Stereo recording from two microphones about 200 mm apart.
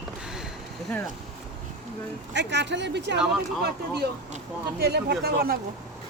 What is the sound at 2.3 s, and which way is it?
Speech, 60° right (ahead or behind).